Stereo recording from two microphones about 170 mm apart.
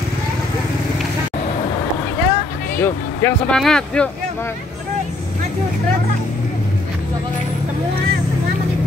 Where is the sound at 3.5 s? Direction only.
5° left (ahead or behind).